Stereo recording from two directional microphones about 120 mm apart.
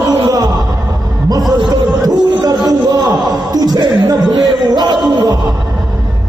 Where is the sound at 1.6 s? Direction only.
35° right (ahead or behind).